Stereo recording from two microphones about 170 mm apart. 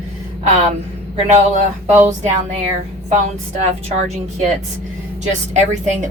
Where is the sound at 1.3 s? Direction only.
45° right (ahead or behind).